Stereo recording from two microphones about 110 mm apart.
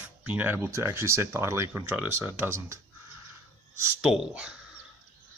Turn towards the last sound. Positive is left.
turn(degrees=-10)  # may be behind; listen again after turning